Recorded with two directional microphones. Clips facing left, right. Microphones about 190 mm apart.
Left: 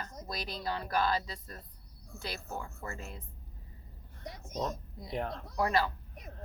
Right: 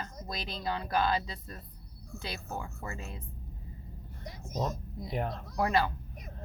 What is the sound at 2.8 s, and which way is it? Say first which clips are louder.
Speech: right 1 dB; 15° right (ahead or behind).